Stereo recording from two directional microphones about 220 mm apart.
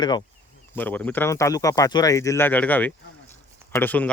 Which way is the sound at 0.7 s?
10° left (ahead or behind).